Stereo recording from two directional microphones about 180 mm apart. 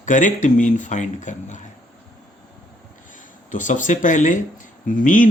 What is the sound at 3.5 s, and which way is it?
Speech, 45° left (ahead or behind).